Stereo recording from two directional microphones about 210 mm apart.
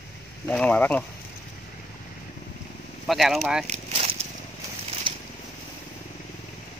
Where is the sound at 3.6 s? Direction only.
30° right (ahead or behind).